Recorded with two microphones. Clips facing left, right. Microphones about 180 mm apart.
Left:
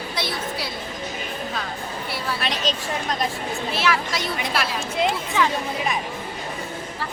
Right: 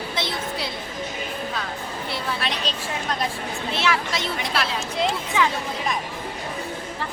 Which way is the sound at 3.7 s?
25° right (ahead or behind).